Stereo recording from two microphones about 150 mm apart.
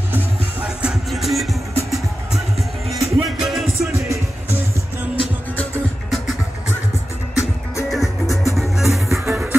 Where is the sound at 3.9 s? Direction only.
20° right (ahead or behind).